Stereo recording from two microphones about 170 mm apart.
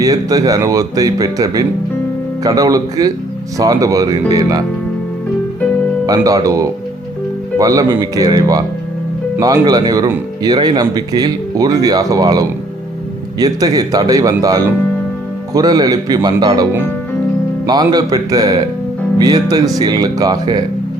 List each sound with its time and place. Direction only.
0.0 s speech: 20° right (ahead or behind)
6.1 s speech: 20° right (ahead or behind)
17.7 s speech: 25° right (ahead or behind)